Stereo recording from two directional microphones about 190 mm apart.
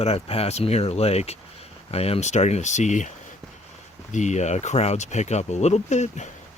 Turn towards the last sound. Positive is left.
turn(degrees=35)  # may be behind; listen again after turning